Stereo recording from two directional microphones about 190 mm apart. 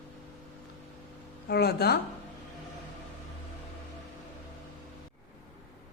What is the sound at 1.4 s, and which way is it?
Speech, 55° left (ahead or behind).